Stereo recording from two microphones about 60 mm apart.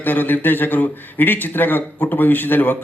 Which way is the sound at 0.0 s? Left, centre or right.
Left.